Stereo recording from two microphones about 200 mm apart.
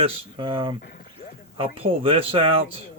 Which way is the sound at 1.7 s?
25° right (ahead or behind).